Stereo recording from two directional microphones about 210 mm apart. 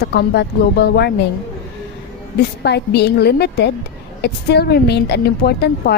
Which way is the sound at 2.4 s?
50° left (ahead or behind).